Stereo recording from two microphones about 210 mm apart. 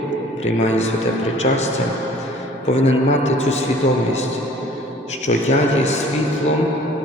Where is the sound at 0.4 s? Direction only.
30° left (ahead or behind).